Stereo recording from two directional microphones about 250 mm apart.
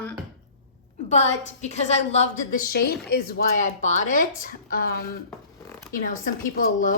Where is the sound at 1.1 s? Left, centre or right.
Left.